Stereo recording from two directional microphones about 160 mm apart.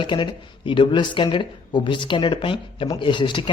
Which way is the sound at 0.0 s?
30° left (ahead or behind).